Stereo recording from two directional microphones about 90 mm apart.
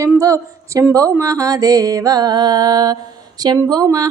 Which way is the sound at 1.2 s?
40° right (ahead or behind).